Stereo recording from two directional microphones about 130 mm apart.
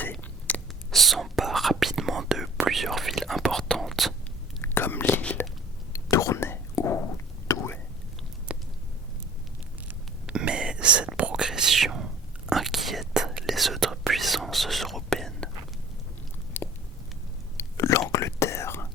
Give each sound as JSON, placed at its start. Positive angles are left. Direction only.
{"t": 0.0, "sound": "whispering", "side_deg": 15}
{"t": 0.9, "sound": "whispering", "side_deg": 0}
{"t": 4.6, "sound": "whispering", "side_deg": 15}
{"t": 8.5, "sound": "a sound", "side_deg": -10}
{"t": 10.2, "sound": "whispering", "side_deg": -5}
{"t": 16.6, "sound": "a sound", "side_deg": 15}
{"t": 17.6, "sound": "whispering", "side_deg": 25}